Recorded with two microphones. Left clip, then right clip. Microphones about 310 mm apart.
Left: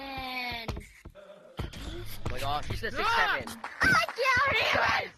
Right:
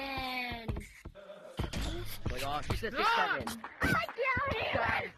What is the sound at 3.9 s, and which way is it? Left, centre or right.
Child singing, left.